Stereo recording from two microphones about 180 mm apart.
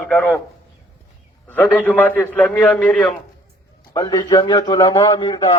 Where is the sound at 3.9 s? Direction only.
20° left (ahead or behind).